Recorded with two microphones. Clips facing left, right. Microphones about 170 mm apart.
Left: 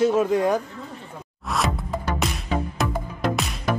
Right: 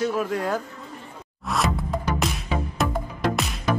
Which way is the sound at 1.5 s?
Centre (ahead or behind).